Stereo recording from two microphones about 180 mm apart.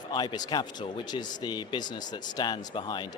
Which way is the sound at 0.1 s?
25° left (ahead or behind).